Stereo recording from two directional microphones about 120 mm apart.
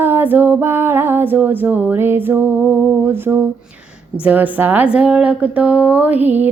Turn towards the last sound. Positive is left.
turn(degrees=-15)  # may be behind; listen again after turning